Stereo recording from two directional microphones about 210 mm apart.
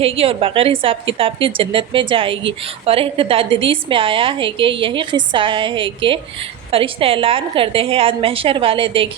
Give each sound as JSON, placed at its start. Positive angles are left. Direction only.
{"t": 0.0, "sound": "a woman's voice", "side_deg": -25}